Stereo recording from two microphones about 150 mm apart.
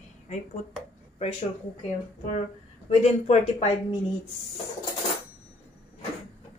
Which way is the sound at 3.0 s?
45° left (ahead or behind).